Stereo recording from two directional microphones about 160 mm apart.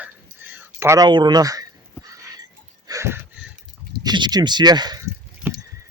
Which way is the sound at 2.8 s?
20° right (ahead or behind).